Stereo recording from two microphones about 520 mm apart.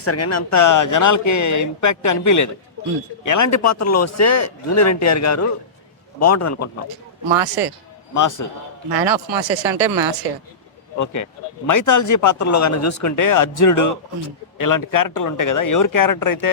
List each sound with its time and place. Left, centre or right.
0.0 s speech: left
7.3 s a man's voice: right
8.1 s speech: left
8.9 s speech: right
11.0 s speech: left